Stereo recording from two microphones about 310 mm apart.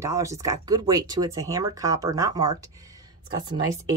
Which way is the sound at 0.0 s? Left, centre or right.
Centre.